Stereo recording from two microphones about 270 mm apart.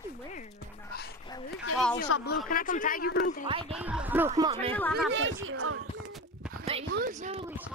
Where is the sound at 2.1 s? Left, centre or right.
Left.